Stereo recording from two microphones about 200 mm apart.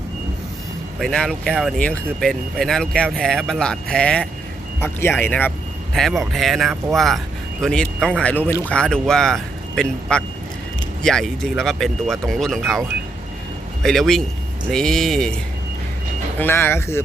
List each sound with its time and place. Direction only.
0.9 s speech: centre (ahead or behind)
13.8 s speech: centre (ahead or behind)
16.4 s speech: 10° left (ahead or behind)